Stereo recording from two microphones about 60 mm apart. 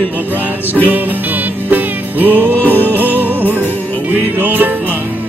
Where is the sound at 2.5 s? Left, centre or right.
Left.